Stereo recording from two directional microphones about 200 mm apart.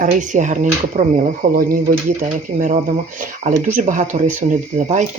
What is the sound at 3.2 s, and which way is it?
Speech, 40° right (ahead or behind).